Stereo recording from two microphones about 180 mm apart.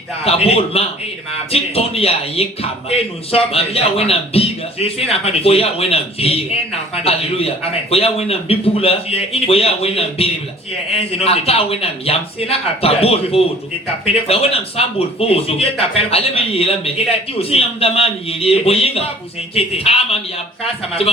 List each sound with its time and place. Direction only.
0.3 s a man's voice: 35° left (ahead or behind)